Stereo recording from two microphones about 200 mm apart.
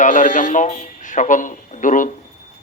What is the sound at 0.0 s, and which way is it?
Speech, 40° left (ahead or behind).